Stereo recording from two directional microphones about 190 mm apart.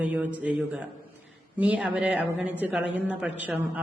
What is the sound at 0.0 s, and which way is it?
Speech, 5° right (ahead or behind).